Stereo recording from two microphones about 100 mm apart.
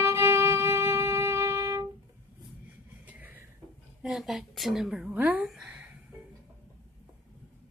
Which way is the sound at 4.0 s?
5° right (ahead or behind).